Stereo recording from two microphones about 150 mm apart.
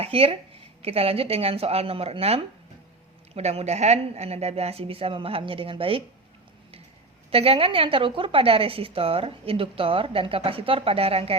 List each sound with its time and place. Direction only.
0.0 s a woman's voice: 40° right (ahead or behind)
7.3 s a woman's voice: 40° right (ahead or behind)